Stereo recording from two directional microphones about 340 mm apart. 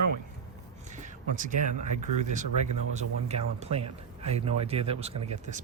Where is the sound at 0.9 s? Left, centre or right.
Right.